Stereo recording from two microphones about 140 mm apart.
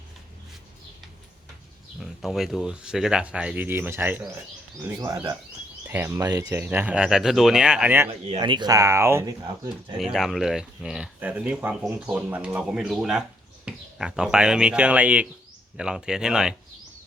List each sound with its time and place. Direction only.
2.0 s speech: centre (ahead or behind)
5.1 s speech: 25° right (ahead or behind)
8.4 s speech: 30° right (ahead or behind)
10.0 s speech: centre (ahead or behind)